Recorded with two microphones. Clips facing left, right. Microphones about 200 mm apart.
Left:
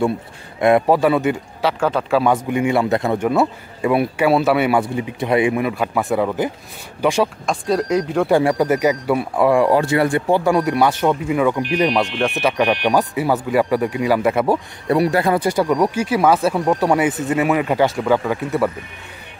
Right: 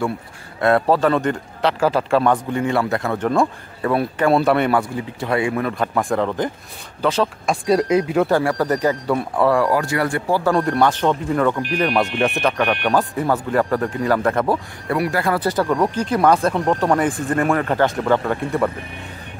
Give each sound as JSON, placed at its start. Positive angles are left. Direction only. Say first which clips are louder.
{"t": 0.6, "sound": "speech", "louder": "left 2 dB", "side_deg": 15}
{"t": 4.7, "sound": "speech", "louder": "left 2 dB", "side_deg": 15}
{"t": 7.4, "sound": "speech", "louder": "right 2 dB", "side_deg": -5}
{"t": 8.3, "sound": "speech", "louder": "left 3 dB", "side_deg": 15}
{"t": 9.7, "sound": "speech", "louder": "left 4 dB", "side_deg": 25}
{"t": 10.5, "sound": "speech", "louder": "left 1 dB", "side_deg": 10}
{"t": 14.9, "sound": "speech", "louder": "left 4 dB", "side_deg": 25}